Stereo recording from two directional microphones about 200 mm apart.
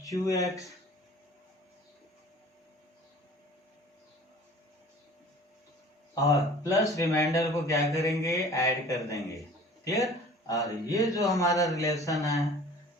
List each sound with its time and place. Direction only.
0.0 s speech: 15° left (ahead or behind)
6.2 s speech: 15° left (ahead or behind)